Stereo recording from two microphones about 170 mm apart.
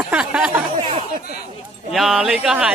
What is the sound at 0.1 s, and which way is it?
Speech, 5° right (ahead or behind).